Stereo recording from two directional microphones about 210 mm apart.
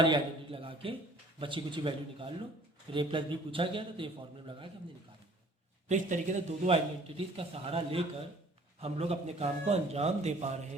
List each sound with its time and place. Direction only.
0.0 s a man's voice: 25° right (ahead or behind)
5.9 s a man's voice: 35° right (ahead or behind)